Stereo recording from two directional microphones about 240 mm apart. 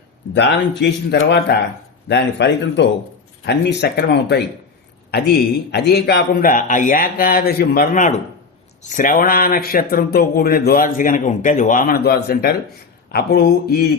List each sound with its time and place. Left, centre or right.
0.3 s speech: left
5.7 s speech: left